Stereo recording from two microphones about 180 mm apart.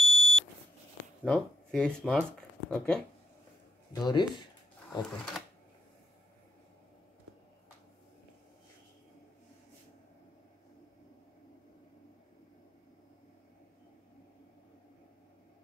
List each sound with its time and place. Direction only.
0.0 s beep: centre (ahead or behind)
1.2 s speech: 5° left (ahead or behind)
3.9 s speech: 25° left (ahead or behind)
4.8 s speech: centre (ahead or behind)